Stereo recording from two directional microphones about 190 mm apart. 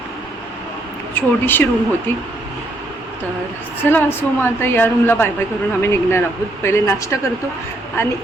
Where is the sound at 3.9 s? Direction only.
10° left (ahead or behind).